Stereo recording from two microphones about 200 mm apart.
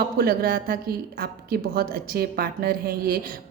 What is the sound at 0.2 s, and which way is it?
A woman's voice, 50° right (ahead or behind).